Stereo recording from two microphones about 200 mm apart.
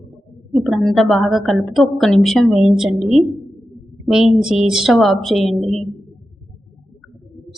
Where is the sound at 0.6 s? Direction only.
Centre (ahead or behind).